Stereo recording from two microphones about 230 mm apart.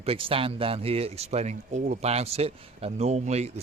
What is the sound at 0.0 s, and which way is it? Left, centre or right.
Speech, right.